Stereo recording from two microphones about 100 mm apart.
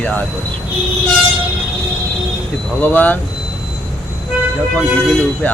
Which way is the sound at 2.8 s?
20° left (ahead or behind).